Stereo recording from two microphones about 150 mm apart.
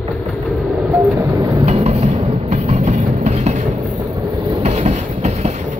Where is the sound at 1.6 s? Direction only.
45° right (ahead or behind).